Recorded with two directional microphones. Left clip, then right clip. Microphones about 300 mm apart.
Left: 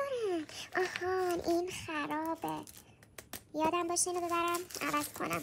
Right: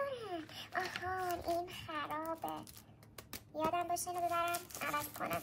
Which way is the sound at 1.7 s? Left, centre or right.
Left.